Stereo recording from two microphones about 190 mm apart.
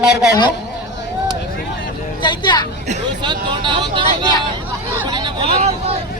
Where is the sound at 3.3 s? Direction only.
25° right (ahead or behind).